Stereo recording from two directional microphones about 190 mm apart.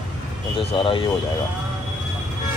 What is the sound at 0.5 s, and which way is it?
Speech, 25° left (ahead or behind).